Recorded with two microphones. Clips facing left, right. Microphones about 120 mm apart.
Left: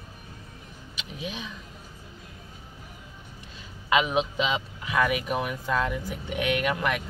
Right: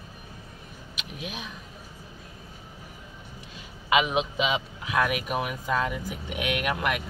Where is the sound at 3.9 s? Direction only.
10° right (ahead or behind).